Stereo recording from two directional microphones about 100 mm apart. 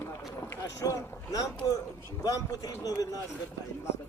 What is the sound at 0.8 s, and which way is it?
Speech, 35° left (ahead or behind).